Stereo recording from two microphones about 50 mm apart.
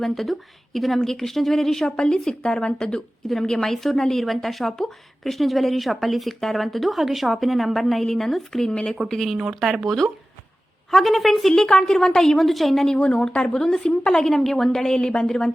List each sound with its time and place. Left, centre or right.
0.0 s a woman's voice: centre
8.7 s a woman's voice: centre
9.0 s speech: centre
10.9 s speech: centre
13.0 s a woman's voice: centre